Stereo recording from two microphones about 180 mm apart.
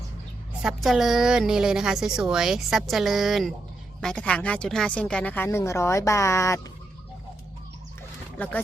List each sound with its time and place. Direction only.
0.6 s a woman's voice: centre (ahead or behind); by 6.6 s 15° left (ahead or behind)